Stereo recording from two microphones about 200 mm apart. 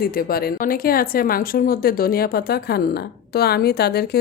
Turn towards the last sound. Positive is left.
turn(degrees=50)  # may be behind; listen again after turning